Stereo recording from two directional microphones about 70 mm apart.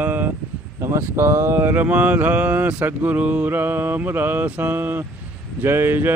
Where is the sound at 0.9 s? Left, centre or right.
Right.